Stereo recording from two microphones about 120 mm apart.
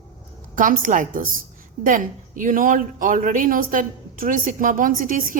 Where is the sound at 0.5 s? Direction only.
90° right.